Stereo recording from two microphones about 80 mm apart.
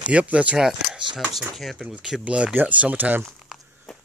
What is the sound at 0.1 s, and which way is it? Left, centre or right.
Speech, centre.